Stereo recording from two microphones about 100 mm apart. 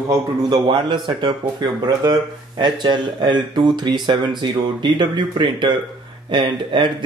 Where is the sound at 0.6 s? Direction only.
55° right (ahead or behind).